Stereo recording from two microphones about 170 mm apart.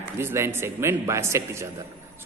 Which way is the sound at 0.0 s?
15° right (ahead or behind).